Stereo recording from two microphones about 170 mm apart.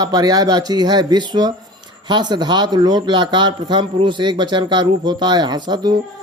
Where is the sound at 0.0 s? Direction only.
20° right (ahead or behind).